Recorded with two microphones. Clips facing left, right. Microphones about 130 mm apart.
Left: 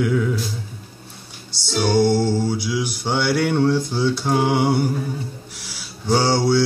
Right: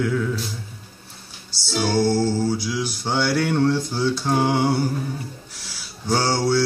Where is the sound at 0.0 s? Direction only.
10° left (ahead or behind).